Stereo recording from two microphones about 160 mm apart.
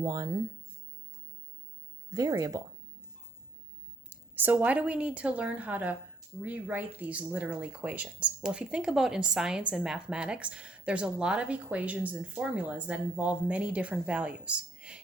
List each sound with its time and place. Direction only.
0.0 s speech: 25° right (ahead or behind)
2.1 s speech: 25° right (ahead or behind)
4.1 s speech: 10° right (ahead or behind)